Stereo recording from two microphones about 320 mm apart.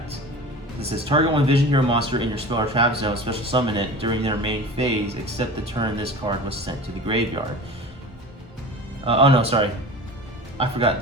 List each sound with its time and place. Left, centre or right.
0.8 s speech: centre
9.0 s speech: centre